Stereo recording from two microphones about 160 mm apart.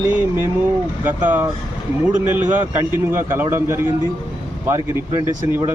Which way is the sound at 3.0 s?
15° right (ahead or behind).